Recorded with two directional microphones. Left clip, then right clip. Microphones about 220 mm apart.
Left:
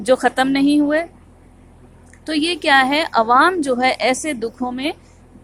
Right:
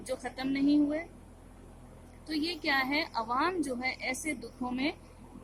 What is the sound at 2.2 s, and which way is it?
Speech, 25° left (ahead or behind).